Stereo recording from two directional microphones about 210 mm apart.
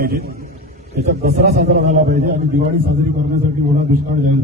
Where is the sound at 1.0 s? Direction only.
35° right (ahead or behind).